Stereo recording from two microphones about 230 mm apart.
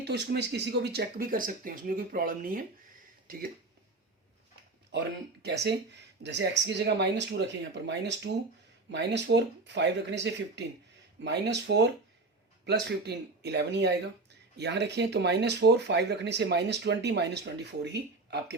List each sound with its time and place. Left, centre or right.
0.0 s speech: right
4.9 s speech: right